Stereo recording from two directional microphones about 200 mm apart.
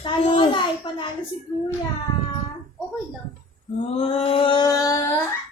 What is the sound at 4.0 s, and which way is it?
Mantra, 30° left (ahead or behind).